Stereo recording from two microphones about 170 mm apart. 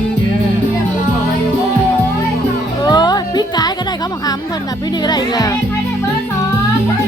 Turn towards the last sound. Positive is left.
turn(degrees=25)  # may be behind; listen again after turning